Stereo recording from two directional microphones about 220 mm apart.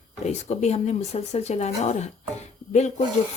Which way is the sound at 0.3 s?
30° left (ahead or behind).